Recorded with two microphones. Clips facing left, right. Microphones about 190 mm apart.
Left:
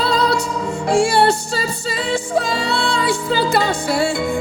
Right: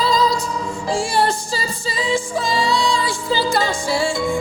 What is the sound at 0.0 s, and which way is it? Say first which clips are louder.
Music: left 1 dB; 65° left (ahead or behind).